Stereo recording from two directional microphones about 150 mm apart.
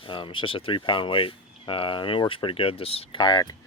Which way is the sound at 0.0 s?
35° left (ahead or behind).